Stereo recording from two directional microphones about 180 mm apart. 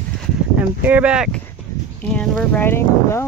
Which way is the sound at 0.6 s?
10° right (ahead or behind).